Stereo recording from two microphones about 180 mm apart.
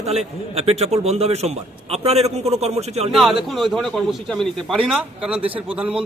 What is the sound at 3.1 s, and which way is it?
A man's voice, centre (ahead or behind).